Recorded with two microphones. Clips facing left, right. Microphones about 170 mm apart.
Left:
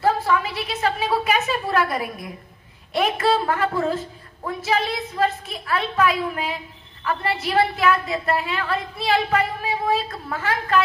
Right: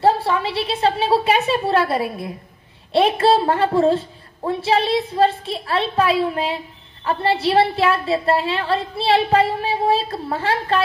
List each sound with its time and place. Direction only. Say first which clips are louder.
0.0 s a woman's voice: right 3 dB; 30° right (ahead or behind)